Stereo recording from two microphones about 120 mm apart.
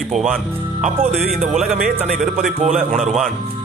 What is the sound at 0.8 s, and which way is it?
Speech, 5° right (ahead or behind).